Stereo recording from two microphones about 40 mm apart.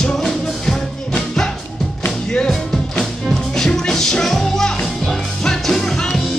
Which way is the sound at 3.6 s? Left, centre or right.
Centre.